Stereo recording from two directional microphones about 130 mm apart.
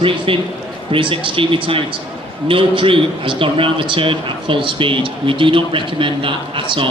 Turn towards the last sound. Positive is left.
turn(degrees=-40)  # may be behind; listen again after turning